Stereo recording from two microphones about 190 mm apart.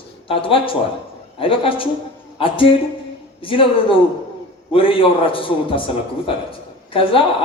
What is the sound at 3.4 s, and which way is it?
A man's voice, 30° left (ahead or behind).